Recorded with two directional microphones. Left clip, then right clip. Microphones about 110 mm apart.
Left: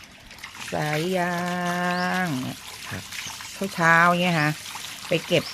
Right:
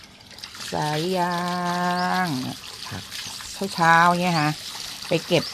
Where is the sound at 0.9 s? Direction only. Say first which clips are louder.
Even; 5° left (ahead or behind).